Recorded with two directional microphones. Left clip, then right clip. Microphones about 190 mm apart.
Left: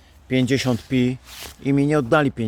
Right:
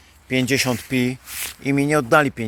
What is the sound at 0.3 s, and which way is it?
Speech, 15° left (ahead or behind).